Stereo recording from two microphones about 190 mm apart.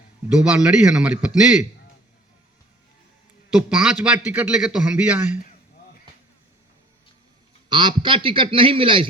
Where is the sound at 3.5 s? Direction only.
5° right (ahead or behind).